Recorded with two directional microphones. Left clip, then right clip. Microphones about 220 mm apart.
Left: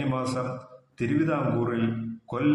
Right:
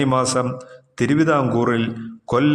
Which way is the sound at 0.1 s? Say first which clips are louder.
Right 10 dB; 45° right (ahead or behind).